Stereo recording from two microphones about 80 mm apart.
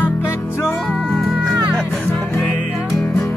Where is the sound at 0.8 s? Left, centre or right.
Centre.